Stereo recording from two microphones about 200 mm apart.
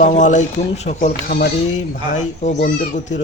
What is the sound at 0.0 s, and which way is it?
Speech, 35° left (ahead or behind).